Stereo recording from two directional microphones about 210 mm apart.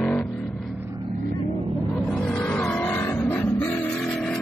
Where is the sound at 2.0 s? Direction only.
5° left (ahead or behind).